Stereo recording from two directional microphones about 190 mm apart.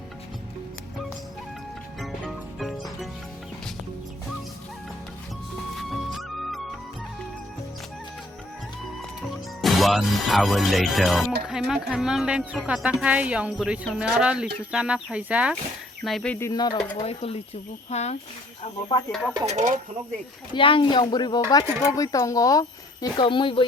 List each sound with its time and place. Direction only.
2.0 s music: centre (ahead or behind)
5.9 s music: centre (ahead or behind)
9.6 s speech: centre (ahead or behind)
16.5 s speech: 20° left (ahead or behind)
19.5 s speech: 40° right (ahead or behind)
20.5 s speech: 25° left (ahead or behind)